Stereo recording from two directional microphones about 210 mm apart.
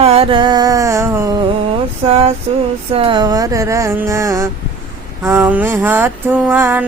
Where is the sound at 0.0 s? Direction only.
25° right (ahead or behind).